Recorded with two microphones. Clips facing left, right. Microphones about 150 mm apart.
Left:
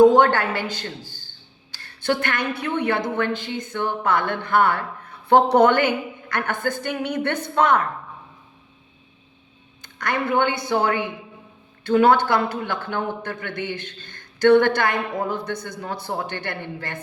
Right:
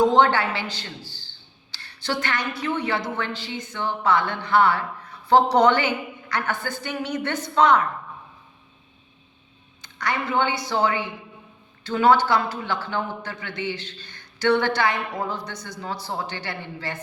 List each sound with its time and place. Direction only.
0.0 s a woman's voice: 50° left (ahead or behind)
9.8 s speech: 55° left (ahead or behind)